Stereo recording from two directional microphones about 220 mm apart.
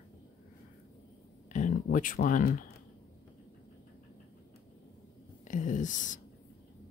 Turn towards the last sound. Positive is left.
turn(degrees=35)  # may be behind; listen again after turning